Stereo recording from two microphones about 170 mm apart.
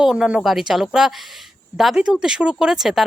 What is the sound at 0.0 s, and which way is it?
Speech, 5° right (ahead or behind).